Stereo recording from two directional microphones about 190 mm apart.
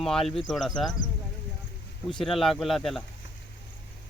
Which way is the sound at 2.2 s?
Centre (ahead or behind).